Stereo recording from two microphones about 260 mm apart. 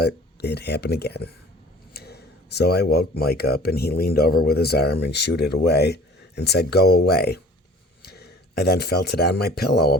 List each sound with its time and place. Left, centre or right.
0.0 s speech: left